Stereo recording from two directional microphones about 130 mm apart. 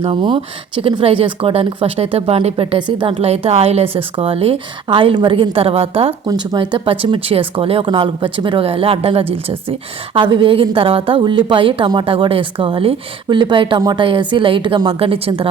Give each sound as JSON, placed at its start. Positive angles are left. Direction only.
{"t": 0.0, "sound": "speech", "side_deg": -40}
{"t": 3.2, "sound": "speech", "side_deg": -50}
{"t": 6.2, "sound": "a woman's voice", "side_deg": -35}